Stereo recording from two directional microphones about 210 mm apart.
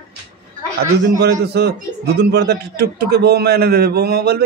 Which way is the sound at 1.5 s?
50° right (ahead or behind).